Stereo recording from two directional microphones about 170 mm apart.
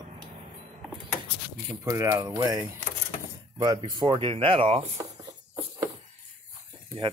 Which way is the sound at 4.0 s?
30° right (ahead or behind).